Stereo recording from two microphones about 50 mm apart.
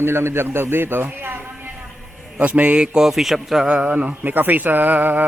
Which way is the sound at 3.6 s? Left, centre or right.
Right.